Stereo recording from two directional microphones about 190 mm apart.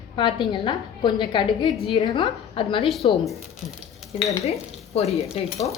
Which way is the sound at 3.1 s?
Centre (ahead or behind).